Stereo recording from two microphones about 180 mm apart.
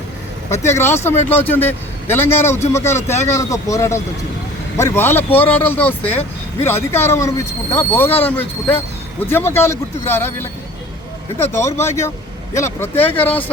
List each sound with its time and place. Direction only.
0.5 s speech: 15° left (ahead or behind)
11.5 s speech: 15° left (ahead or behind)